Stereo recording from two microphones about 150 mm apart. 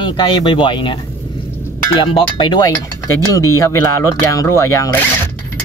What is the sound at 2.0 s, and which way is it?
Speech, 35° left (ahead or behind).